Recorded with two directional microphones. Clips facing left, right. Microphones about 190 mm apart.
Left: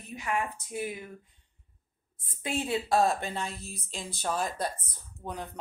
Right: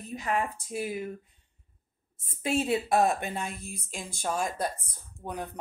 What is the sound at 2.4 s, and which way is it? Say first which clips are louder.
A woman's voice: right 4 dB; 25° right (ahead or behind).